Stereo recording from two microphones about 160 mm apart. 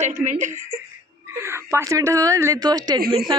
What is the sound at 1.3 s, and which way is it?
A woman's voice, 15° right (ahead or behind).